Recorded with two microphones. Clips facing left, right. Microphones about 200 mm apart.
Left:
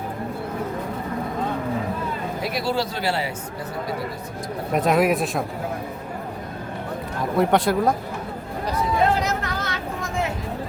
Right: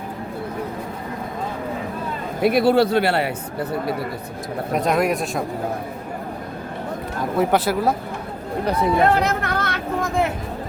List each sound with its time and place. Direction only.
2.4 s speech: 55° right (ahead or behind)
4.7 s speech: centre (ahead or behind)
7.2 s speech: centre (ahead or behind)
8.6 s chatter: 60° right (ahead or behind)